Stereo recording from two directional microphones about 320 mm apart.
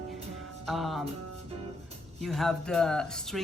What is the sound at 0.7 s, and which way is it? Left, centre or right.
Speech, centre.